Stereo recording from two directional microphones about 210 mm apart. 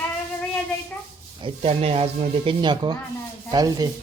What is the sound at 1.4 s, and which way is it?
Speech, 25° right (ahead or behind).